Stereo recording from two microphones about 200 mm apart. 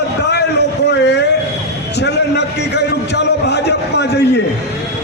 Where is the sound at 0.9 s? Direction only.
60° left (ahead or behind).